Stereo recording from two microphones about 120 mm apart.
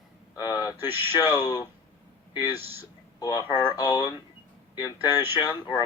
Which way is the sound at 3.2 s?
30° left (ahead or behind).